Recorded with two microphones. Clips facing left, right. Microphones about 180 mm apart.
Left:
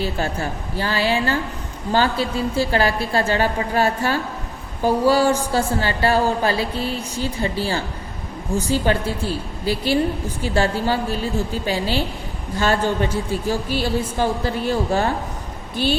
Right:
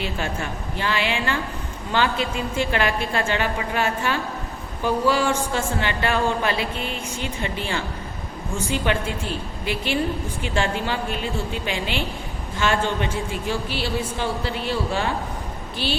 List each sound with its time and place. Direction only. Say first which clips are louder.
0.0 s a woman's voice: left 4 dB; 35° left (ahead or behind)